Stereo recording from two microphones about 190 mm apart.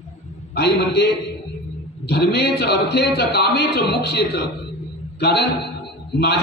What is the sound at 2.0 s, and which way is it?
A man's voice, 60° left (ahead or behind).